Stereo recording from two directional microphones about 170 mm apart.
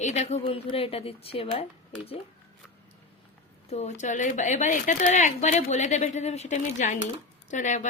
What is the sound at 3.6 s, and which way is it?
Speech, 40° left (ahead or behind).